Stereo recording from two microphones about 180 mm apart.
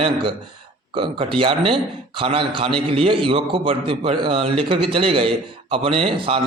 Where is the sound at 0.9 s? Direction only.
30° right (ahead or behind).